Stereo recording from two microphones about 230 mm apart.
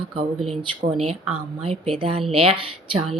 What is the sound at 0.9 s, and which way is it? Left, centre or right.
Speech, right.